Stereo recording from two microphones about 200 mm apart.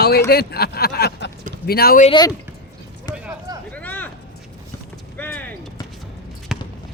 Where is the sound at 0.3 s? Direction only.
50° left (ahead or behind).